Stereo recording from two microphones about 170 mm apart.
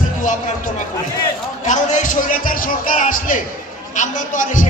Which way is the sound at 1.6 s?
45° left (ahead or behind).